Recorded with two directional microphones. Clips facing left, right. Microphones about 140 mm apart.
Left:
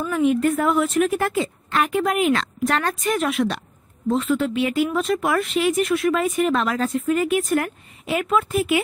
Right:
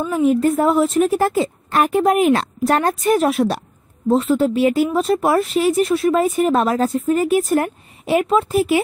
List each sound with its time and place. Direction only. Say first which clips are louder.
0.2 s speech: right 3 dB; 35° right (ahead or behind)